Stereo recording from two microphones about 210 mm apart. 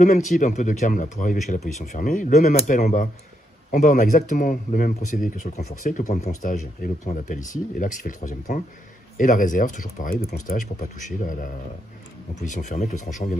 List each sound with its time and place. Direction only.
0.0 s speech: 35° left (ahead or behind)